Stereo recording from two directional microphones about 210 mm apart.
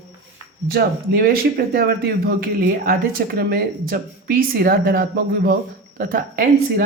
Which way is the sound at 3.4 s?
50° right (ahead or behind).